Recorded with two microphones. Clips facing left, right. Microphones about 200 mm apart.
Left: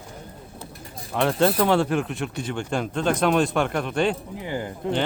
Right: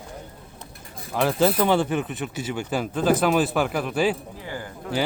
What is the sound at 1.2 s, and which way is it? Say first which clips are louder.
Speech: even; centre (ahead or behind).